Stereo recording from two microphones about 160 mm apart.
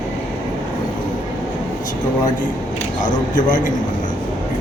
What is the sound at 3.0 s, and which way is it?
Speech, 55° left (ahead or behind).